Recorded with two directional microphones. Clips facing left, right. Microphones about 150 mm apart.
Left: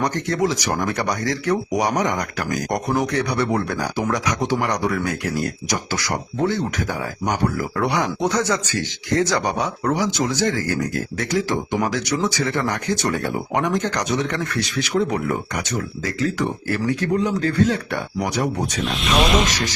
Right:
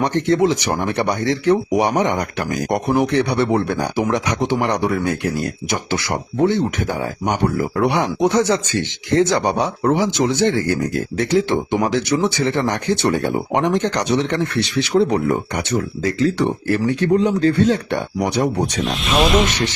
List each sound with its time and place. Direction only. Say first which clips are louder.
0.0 s speech: right 5 dB; 25° right (ahead or behind)
18.8 s speech: right 1 dB; centre (ahead or behind)